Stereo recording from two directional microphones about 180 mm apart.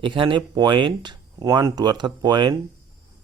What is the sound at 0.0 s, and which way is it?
Speech, 30° right (ahead or behind).